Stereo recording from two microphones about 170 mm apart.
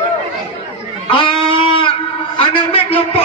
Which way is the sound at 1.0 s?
30° left (ahead or behind).